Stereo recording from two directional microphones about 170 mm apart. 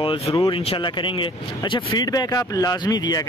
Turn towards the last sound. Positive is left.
turn(degrees=25)  # may be behind; listen again after turning